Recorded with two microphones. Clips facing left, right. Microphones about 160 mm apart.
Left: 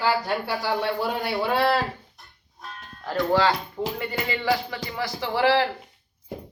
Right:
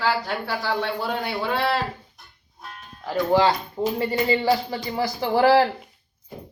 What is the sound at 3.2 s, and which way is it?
Speech, 20° right (ahead or behind).